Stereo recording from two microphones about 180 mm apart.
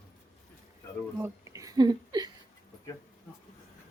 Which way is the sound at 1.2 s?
15° right (ahead or behind).